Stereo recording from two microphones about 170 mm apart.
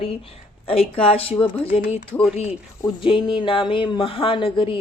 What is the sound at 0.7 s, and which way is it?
Speech, 35° left (ahead or behind).